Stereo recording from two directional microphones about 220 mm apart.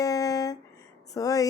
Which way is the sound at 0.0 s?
15° left (ahead or behind).